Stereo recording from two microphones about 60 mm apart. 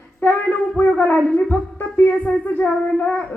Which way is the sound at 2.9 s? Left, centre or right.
Left.